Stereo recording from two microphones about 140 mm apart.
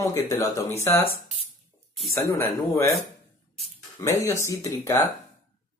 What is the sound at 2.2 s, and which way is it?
Speech, 20° left (ahead or behind).